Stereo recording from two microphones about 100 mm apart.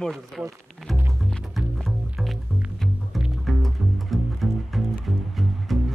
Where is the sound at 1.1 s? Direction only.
Centre (ahead or behind).